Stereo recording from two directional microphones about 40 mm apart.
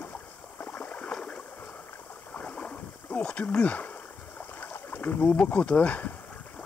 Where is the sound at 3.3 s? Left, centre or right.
Left.